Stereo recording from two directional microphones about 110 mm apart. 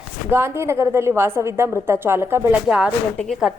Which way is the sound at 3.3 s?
Centre (ahead or behind).